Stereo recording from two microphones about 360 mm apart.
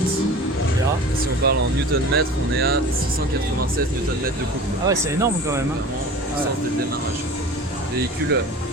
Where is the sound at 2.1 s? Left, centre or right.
Right.